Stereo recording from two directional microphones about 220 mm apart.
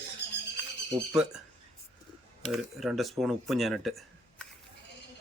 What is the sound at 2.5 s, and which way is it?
Speech, centre (ahead or behind).